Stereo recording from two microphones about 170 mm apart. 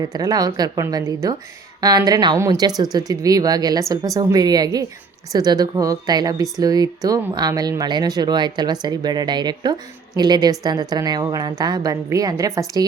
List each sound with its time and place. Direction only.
0.0 s speech: 20° right (ahead or behind)